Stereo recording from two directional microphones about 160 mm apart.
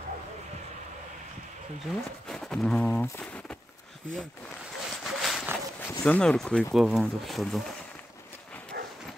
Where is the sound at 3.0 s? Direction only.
10° left (ahead or behind).